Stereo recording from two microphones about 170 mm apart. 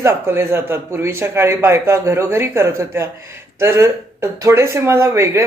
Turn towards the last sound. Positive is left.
turn(degrees=-15)  # may be behind; listen again after turning